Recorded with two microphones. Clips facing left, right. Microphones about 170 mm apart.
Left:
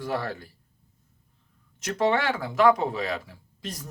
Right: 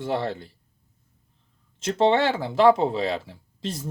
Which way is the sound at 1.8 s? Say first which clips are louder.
Right 4 dB; 25° right (ahead or behind).